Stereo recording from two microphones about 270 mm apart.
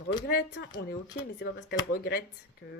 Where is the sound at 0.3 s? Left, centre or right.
Left.